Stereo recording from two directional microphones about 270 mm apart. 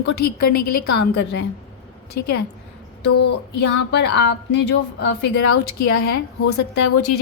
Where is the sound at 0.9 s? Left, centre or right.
Left.